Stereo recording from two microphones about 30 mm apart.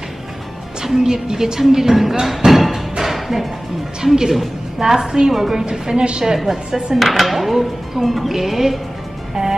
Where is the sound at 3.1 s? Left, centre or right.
Centre.